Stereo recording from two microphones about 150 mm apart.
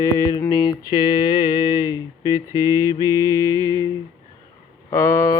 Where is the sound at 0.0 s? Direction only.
25° left (ahead or behind).